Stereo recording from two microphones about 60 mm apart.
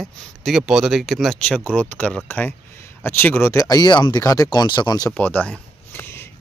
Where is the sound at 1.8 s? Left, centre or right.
Left.